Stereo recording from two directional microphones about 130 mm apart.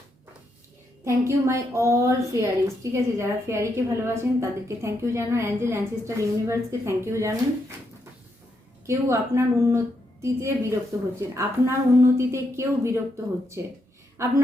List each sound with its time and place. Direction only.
1.0 s a woman's voice: 20° right (ahead or behind)
8.9 s a woman's voice: 20° right (ahead or behind)